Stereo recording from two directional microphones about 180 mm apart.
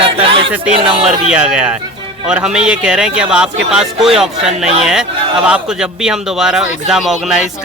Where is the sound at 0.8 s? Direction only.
30° right (ahead or behind).